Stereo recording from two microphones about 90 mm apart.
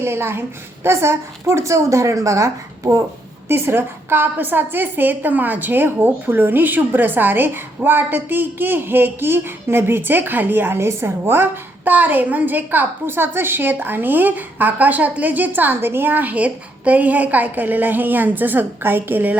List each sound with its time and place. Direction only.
0.0 s a woman's voice: 25° right (ahead or behind)
3.5 s a woman's voice: 25° right (ahead or behind)